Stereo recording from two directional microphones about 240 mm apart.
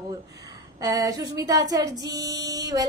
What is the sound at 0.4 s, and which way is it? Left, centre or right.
A woman's voice, centre.